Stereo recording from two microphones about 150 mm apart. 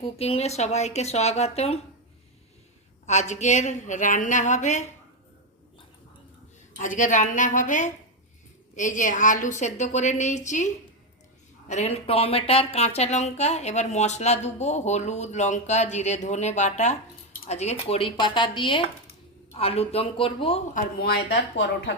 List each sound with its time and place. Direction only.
0.0 s speech: 40° left (ahead or behind)
3.1 s speech: 50° left (ahead or behind)
6.7 s a woman's voice: 60° left (ahead or behind)
11.7 s speech: 45° left (ahead or behind)
20.7 s speech: 90° left